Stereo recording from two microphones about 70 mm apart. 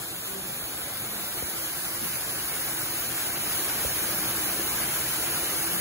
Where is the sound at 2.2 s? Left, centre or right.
Right.